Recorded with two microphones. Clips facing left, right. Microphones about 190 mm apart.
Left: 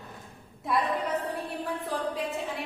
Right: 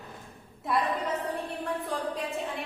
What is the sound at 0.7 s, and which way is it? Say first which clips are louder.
Speech: even; centre (ahead or behind).